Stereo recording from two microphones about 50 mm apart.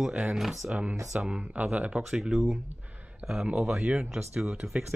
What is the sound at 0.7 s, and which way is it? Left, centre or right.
Speech, right.